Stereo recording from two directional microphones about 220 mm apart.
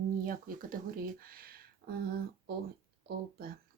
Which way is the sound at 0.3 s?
40° right (ahead or behind).